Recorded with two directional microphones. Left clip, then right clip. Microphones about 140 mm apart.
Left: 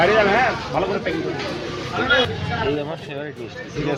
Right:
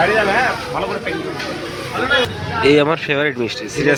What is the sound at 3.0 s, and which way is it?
Speech, 25° right (ahead or behind).